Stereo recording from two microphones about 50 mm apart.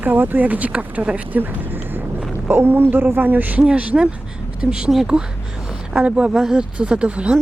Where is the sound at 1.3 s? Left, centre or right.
Right.